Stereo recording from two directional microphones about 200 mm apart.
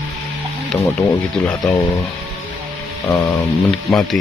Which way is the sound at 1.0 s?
5° left (ahead or behind).